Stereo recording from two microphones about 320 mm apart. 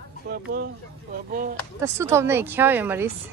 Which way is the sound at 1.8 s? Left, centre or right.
Centre.